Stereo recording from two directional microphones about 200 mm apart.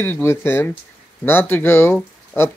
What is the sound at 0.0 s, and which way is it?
Speech, 10° left (ahead or behind).